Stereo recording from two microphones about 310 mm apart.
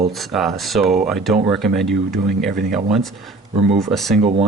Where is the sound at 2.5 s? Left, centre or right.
Right.